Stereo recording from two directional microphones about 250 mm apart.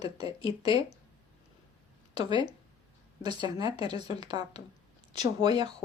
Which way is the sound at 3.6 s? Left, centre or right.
Centre.